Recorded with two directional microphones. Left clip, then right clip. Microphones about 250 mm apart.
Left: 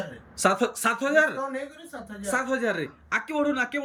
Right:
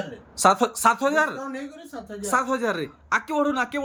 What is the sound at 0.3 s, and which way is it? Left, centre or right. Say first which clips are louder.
Speech: right 4 dB; centre.